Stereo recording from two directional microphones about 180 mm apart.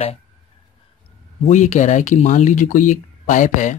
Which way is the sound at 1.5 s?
40° left (ahead or behind).